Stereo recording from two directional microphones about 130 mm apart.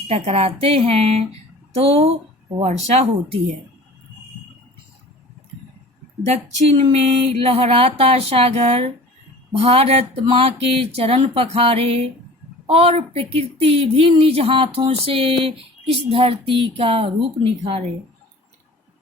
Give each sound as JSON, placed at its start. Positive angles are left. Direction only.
{"t": 0.1, "sound": "a woman's voice", "side_deg": -50}
{"t": 6.2, "sound": "a woman's voice", "side_deg": -55}